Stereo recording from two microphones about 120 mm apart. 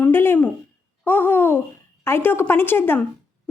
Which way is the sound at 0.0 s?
20° left (ahead or behind).